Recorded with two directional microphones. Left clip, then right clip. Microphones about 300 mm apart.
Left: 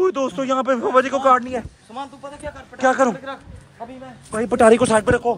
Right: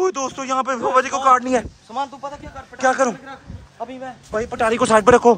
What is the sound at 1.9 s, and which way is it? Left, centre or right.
Speech, right.